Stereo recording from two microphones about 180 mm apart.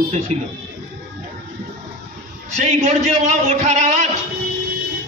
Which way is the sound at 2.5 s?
40° right (ahead or behind).